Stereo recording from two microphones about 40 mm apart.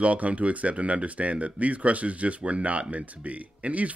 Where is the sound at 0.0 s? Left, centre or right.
Right.